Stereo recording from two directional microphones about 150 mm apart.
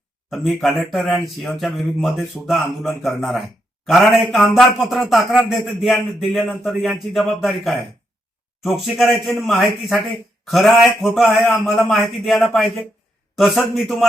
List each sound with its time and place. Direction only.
0.3 s a man's voice: centre (ahead or behind)
8.6 s a man's voice: centre (ahead or behind)